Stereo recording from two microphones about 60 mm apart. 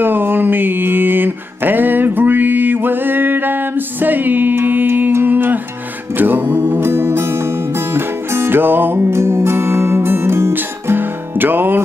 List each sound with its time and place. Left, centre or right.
0.0 s a sound: right
6.1 s music: right
10.5 s music: right